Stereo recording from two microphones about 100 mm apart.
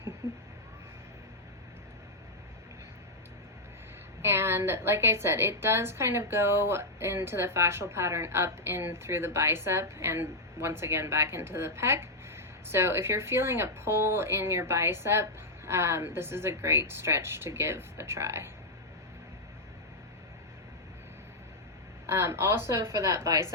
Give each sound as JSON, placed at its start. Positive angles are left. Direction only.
{"t": 4.2, "sound": "a woman's voice", "side_deg": -25}
{"t": 22.0, "sound": "a woman's voice", "side_deg": -30}